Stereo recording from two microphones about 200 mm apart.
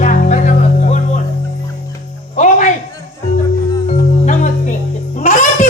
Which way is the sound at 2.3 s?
35° left (ahead or behind).